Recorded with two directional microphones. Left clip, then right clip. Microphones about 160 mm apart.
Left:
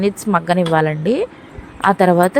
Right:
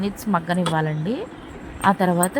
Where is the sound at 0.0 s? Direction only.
40° left (ahead or behind).